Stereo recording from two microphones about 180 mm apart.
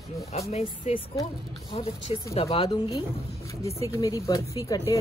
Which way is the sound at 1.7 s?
35° left (ahead or behind).